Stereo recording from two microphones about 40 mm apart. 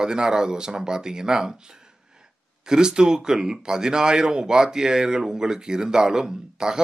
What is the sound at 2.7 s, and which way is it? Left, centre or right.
Speech, centre.